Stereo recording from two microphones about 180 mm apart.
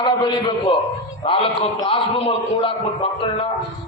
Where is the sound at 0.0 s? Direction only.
25° left (ahead or behind).